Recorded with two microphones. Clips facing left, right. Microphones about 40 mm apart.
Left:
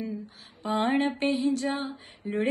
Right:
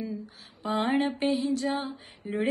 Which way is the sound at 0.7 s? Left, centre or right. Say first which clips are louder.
Left 1 dB; left.